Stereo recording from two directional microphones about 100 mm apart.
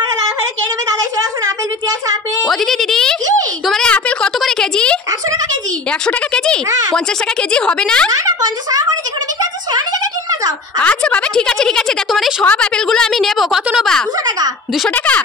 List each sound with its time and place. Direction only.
2.4 s a woman's voice: centre (ahead or behind)
3.6 s a sound: 5° left (ahead or behind)
6.0 s speech: 10° left (ahead or behind)
8.3 s speech: 40° right (ahead or behind)
10.8 s a woman's voice: 15° left (ahead or behind)